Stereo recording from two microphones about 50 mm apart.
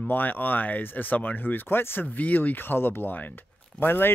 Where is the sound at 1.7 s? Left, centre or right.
Left.